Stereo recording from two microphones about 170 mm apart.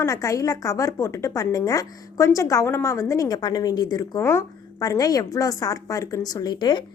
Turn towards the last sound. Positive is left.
turn(degrees=25)  # may be behind; listen again after turning